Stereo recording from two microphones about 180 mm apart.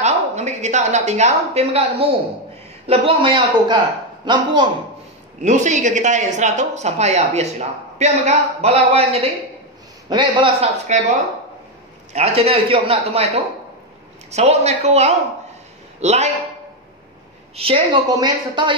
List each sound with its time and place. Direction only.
0.0 s a woman's voice: 40° right (ahead or behind)
5.4 s a woman's voice: 40° right (ahead or behind); by 10.7 s 25° right (ahead or behind)
10.9 s a woman's voice: 40° right (ahead or behind)
12.1 s a woman's voice: 35° right (ahead or behind)
14.3 s a woman's voice: 35° right (ahead or behind)
17.6 s a woman's voice: 30° right (ahead or behind)